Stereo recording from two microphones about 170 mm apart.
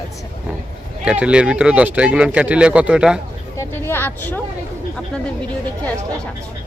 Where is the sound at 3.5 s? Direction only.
15° left (ahead or behind).